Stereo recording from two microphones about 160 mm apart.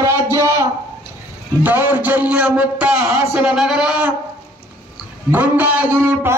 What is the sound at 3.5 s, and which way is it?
Speech, 5° right (ahead or behind).